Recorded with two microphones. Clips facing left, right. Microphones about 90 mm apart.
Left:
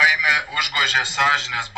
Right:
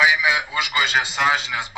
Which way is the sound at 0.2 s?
15° right (ahead or behind).